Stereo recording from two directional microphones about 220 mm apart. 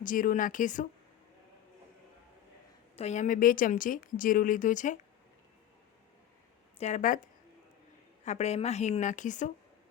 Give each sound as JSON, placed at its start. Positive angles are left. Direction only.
{"t": 0.0, "sound": "speech", "side_deg": 40}
{"t": 2.9, "sound": "speech", "side_deg": 30}
{"t": 6.7, "sound": "speech", "side_deg": 30}
{"t": 8.2, "sound": "speech", "side_deg": 30}